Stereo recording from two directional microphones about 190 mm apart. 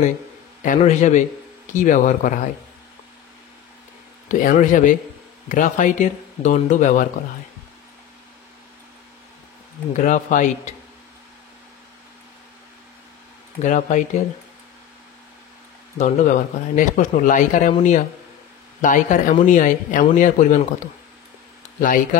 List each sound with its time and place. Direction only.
0.7 s speech: 40° left (ahead or behind)
4.3 s speech: 45° left (ahead or behind)
9.9 s speech: 40° left (ahead or behind)
13.6 s speech: 40° left (ahead or behind)
16.0 s speech: 40° left (ahead or behind)